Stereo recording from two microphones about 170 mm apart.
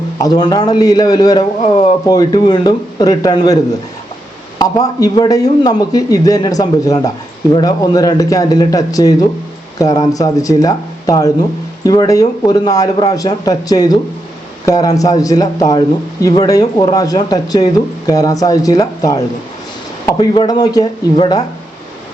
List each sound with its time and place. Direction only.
0.2 s speech: 25° left (ahead or behind)
1.4 s speech: 40° left (ahead or behind)
2.0 s speech: 25° left (ahead or behind)